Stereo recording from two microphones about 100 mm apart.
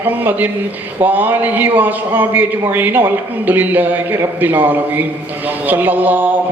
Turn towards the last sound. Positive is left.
turn(degrees=-20)  # may be behind; listen again after turning